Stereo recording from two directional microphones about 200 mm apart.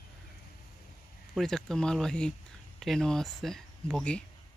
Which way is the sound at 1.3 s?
Centre (ahead or behind).